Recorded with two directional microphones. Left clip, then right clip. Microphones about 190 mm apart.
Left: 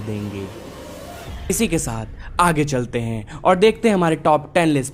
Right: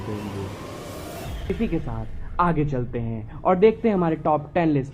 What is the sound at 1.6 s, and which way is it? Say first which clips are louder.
A woman's voice: left 7 dB; 40° left (ahead or behind).